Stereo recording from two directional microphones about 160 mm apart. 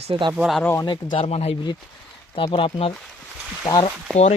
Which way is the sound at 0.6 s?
15° left (ahead or behind).